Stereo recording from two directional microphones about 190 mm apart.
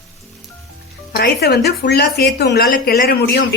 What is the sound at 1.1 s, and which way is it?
Speech, 60° left (ahead or behind).